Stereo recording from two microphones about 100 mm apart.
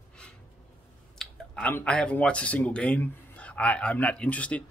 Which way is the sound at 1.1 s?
5° left (ahead or behind).